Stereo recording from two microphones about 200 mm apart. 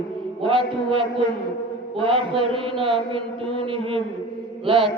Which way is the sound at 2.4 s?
25° right (ahead or behind).